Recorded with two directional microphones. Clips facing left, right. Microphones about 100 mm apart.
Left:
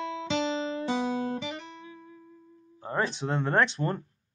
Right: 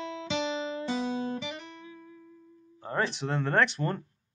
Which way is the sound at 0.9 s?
55° left (ahead or behind).